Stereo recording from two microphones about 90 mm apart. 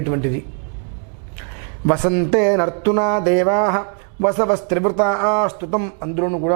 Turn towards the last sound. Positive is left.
turn(degrees=-15)  # may be behind; listen again after turning